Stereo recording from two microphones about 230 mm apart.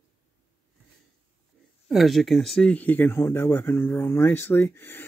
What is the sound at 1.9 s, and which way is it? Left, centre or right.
Speech, centre.